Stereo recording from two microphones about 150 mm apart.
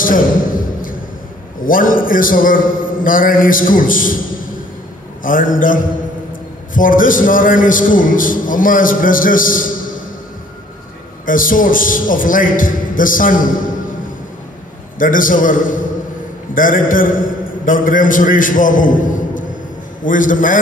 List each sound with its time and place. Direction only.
1.6 s a man's voice: 65° left (ahead or behind)
5.2 s a man's voice: 65° left (ahead or behind)
11.2 s a man's voice: 65° left (ahead or behind)
15.0 s a man's voice: 65° left (ahead or behind)